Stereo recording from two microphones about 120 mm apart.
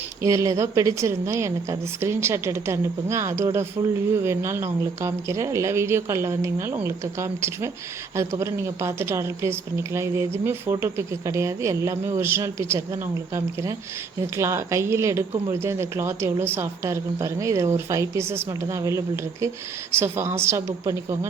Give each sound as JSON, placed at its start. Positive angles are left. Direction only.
{"t": 0.2, "sound": "a woman's voice", "side_deg": -25}